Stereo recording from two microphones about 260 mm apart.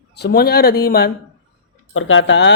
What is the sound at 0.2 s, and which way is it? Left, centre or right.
Speech, left.